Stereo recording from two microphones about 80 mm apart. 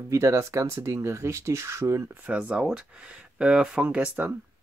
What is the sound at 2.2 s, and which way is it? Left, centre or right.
Speech, centre.